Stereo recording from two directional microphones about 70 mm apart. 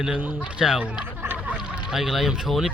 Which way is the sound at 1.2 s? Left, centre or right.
Right.